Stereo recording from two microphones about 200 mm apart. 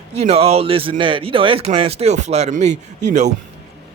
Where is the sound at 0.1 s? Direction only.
30° right (ahead or behind).